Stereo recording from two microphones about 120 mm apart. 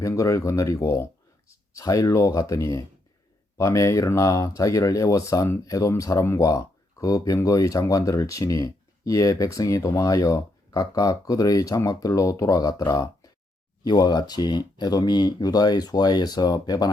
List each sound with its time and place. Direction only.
0.0 s speech: 25° left (ahead or behind)